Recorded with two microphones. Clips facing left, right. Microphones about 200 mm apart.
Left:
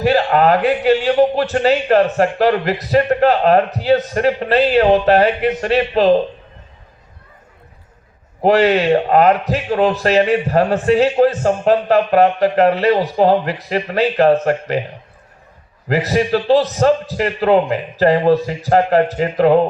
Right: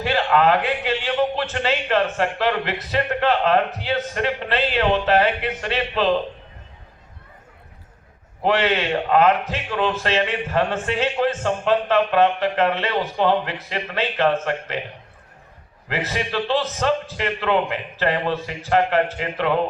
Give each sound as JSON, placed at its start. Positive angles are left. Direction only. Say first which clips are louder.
{"t": 0.0, "sound": "speech", "louder": "left 5 dB", "side_deg": 40}
{"t": 8.4, "sound": "speech", "louder": "left 7 dB", "side_deg": 40}
{"t": 15.9, "sound": "speech", "louder": "left 10 dB", "side_deg": 40}